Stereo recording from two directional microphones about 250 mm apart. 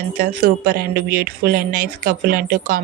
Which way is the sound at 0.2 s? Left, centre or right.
Right.